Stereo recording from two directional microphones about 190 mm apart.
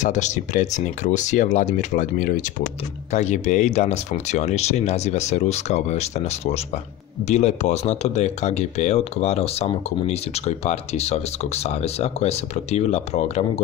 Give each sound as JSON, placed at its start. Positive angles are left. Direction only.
{"t": 0.0, "sound": "speech", "side_deg": 40}